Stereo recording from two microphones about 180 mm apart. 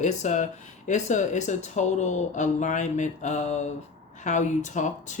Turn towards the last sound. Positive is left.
turn(degrees=45)  # may be behind; listen again after turning